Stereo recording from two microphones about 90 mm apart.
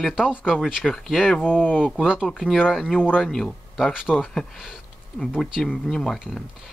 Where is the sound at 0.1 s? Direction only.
10° right (ahead or behind).